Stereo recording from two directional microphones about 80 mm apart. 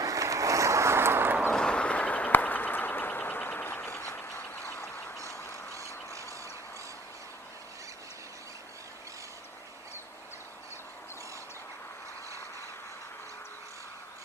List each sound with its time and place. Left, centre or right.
0.0 s vehicle: right
1.5 s a sound: centre; by 5.1 s left
5.3 s duck: left